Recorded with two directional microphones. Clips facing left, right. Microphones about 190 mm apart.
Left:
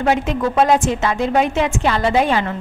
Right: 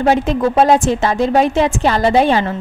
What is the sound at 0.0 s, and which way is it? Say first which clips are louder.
A woman's voice: right 4 dB; 35° right (ahead or behind).